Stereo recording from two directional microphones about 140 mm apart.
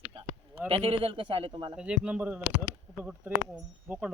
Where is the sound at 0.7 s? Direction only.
45° right (ahead or behind).